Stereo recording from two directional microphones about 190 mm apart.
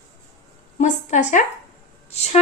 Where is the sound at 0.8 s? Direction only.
40° left (ahead or behind).